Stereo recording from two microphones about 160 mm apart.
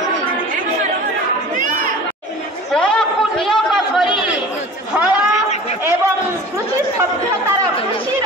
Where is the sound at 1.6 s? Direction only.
55° right (ahead or behind).